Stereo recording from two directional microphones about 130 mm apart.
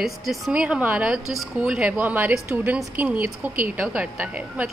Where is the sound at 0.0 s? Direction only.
Centre (ahead or behind).